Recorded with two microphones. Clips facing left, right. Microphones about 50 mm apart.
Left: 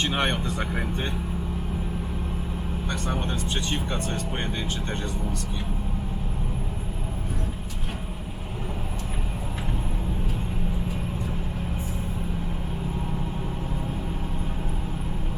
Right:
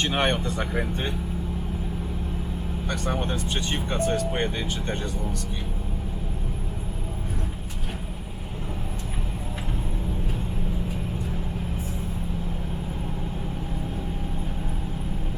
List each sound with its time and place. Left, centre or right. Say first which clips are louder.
0.0 s speech: right 1 dB; centre
3.1 s speech: right 2 dB; centre
4.3 s speech: right 3 dB; centre